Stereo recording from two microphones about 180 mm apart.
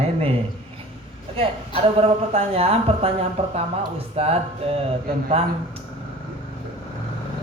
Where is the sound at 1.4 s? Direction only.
30° right (ahead or behind).